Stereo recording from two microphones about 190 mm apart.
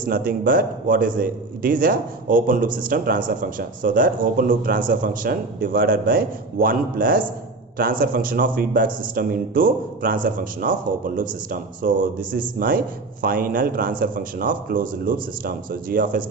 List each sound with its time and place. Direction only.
0.0 s a man's voice: 50° right (ahead or behind)